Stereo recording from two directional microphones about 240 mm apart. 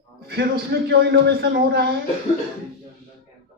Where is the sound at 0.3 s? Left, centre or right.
Right.